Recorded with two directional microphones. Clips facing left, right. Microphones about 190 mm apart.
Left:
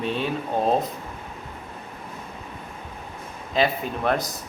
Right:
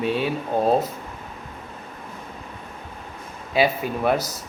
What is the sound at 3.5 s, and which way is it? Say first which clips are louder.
Speech: right 2 dB; 10° right (ahead or behind).